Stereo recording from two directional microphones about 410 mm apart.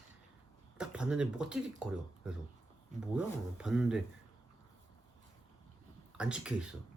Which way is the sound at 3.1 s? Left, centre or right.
Centre.